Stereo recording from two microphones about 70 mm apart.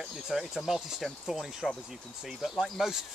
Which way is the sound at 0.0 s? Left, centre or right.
Centre.